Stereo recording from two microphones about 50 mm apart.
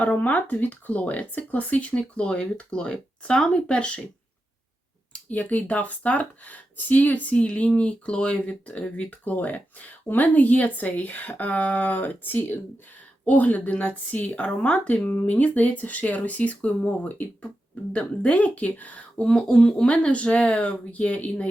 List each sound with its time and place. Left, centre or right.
0.0 s speech: left
5.3 s speech: left
19.2 s speech: centre